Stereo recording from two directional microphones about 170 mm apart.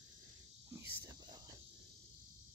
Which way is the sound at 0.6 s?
15° right (ahead or behind).